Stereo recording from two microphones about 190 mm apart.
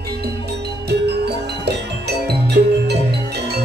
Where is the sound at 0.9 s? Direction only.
60° right (ahead or behind).